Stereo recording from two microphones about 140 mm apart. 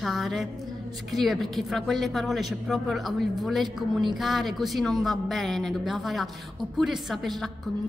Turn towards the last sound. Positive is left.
turn(degrees=0)  # may be behind; listen again after turning